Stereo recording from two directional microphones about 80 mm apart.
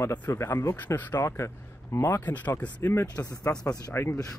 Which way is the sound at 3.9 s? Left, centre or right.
Left.